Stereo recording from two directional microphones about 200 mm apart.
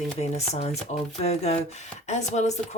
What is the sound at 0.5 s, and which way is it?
Speech, 30° left (ahead or behind).